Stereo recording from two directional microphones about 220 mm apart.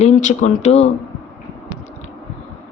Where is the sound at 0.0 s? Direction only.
35° left (ahead or behind).